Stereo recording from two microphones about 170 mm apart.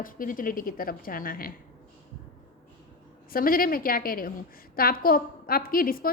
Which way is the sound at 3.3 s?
55° left (ahead or behind).